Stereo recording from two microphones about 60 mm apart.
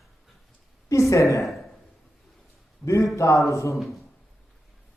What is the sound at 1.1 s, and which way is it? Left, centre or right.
Speech, left.